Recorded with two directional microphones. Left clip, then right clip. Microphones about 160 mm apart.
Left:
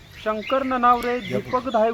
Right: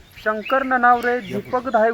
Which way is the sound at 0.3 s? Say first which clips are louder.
Right 3 dB; 15° right (ahead or behind).